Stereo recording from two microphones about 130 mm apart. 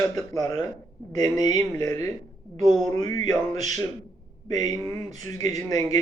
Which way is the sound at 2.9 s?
30° left (ahead or behind).